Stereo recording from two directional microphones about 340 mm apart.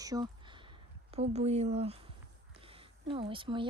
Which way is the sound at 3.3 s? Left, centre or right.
Centre.